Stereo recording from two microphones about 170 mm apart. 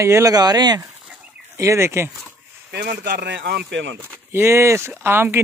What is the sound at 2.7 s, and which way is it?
Speech, 75° right (ahead or behind).